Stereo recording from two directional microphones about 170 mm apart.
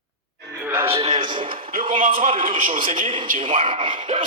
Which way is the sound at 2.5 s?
55° right (ahead or behind).